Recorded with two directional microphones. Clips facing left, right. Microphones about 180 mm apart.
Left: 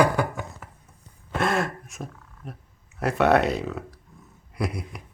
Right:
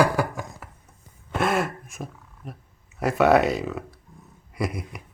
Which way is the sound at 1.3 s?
Centre (ahead or behind).